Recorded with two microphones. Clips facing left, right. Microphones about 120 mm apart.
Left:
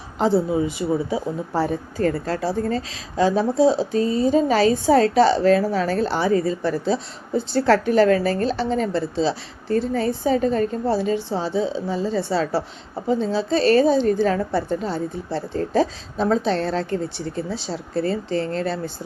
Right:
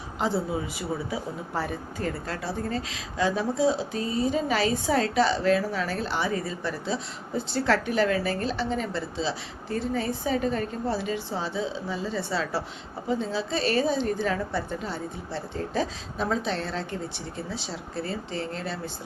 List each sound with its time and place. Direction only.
0.2 s a woman's voice: 30° left (ahead or behind)
17.9 s speech: 50° left (ahead or behind)